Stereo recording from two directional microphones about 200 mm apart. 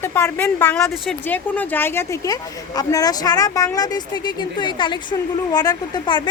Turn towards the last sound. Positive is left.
turn(degrees=20)  # may be behind; listen again after turning